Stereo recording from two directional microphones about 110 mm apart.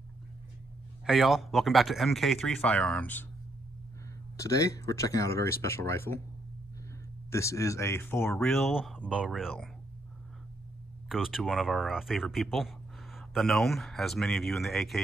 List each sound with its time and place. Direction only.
1.0 s speech: 5° right (ahead or behind)
2.5 s speech: 10° left (ahead or behind)
4.4 s speech: 30° left (ahead or behind)
7.2 s speech: 25° left (ahead or behind)
8.4 s speech: centre (ahead or behind)
11.1 s speech: 5° right (ahead or behind)